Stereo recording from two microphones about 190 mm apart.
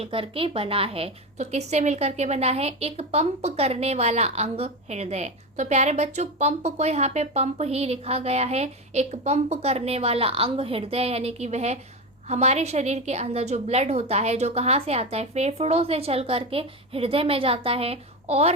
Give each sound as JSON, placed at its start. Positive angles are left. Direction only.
{"t": 0.0, "sound": "a woman's voice", "side_deg": -30}